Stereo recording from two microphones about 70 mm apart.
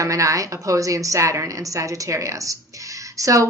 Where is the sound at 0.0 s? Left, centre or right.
Right.